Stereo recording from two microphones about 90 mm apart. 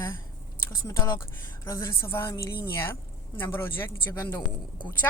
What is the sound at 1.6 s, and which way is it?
A woman's voice, 35° left (ahead or behind).